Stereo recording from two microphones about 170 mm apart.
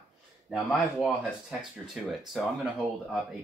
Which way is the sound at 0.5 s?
Centre (ahead or behind).